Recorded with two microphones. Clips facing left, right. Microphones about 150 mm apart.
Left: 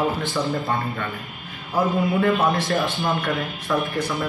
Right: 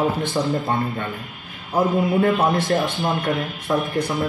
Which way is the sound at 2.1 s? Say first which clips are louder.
Right 2 dB; 25° right (ahead or behind).